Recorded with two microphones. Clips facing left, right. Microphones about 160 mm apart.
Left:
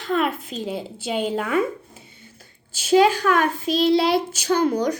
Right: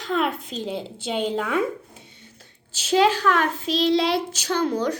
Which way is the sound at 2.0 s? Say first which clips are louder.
Left 1 dB; 5° left (ahead or behind).